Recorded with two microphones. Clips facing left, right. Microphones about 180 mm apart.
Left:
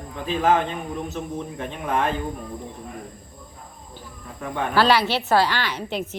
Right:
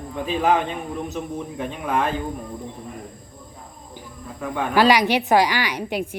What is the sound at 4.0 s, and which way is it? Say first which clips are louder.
Bird: right 2 dB; 15° right (ahead or behind).